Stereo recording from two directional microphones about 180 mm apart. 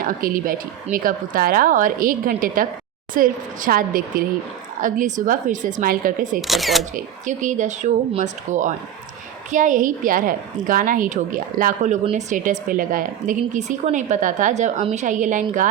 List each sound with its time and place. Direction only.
0.0 s speech: 50° right (ahead or behind)
6.5 s speech: centre (ahead or behind)
6.9 s speech: 45° right (ahead or behind)